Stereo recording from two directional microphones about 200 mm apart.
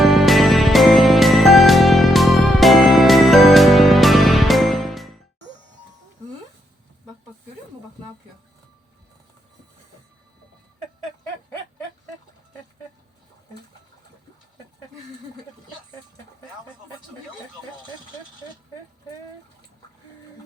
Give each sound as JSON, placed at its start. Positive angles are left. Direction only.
{"t": 0.0, "sound": "music", "side_deg": 0}